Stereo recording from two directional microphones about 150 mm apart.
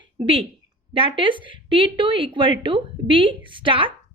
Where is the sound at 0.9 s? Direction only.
35° right (ahead or behind).